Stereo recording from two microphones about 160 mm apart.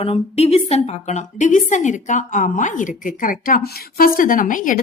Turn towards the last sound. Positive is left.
turn(degrees=55)  # may be behind; listen again after turning